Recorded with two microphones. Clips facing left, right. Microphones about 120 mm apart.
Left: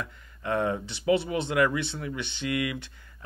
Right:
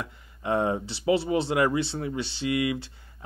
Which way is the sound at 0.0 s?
25° right (ahead or behind).